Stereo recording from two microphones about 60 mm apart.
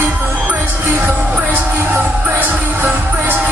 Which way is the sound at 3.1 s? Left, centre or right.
Right.